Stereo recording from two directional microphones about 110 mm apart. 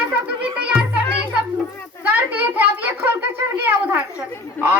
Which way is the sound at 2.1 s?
15° right (ahead or behind).